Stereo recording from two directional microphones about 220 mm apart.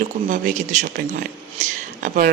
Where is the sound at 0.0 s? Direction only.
35° right (ahead or behind).